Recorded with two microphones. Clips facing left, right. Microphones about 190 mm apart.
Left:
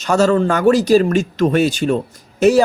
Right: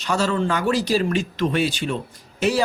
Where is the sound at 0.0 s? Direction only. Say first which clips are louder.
Left 8 dB; 45° left (ahead or behind).